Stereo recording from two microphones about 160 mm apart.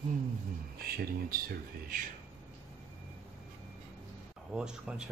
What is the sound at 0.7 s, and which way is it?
Speech, 70° right (ahead or behind).